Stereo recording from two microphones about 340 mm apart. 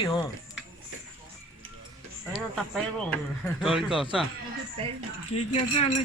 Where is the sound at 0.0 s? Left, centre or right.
Centre.